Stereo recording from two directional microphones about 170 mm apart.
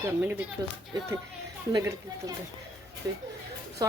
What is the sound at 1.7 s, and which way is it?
Speech, 20° right (ahead or behind).